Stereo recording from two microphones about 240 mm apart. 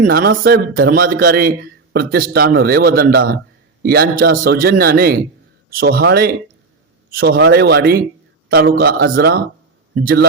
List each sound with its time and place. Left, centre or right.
0.0 s a man's voice: right